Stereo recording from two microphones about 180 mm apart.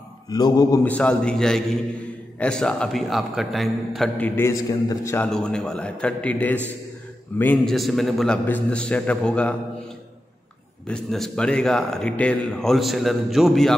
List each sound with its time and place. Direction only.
0.3 s mantra: 20° left (ahead or behind)
0.8 s speech: 5° left (ahead or behind)
4.4 s a man's voice: 20° left (ahead or behind)
10.9 s speech: centre (ahead or behind)